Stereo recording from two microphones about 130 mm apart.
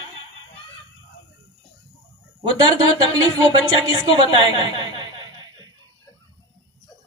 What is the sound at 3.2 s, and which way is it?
A man's voice, 30° right (ahead or behind).